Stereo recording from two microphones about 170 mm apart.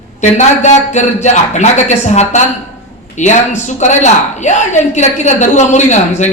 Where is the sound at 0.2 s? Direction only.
45° left (ahead or behind).